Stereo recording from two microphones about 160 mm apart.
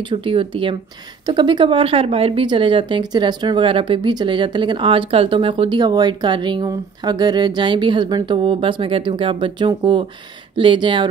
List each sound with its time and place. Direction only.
0.1 s speech: 35° right (ahead or behind)